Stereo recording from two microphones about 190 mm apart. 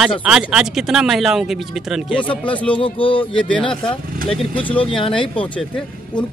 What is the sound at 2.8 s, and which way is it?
Speech, 25° left (ahead or behind).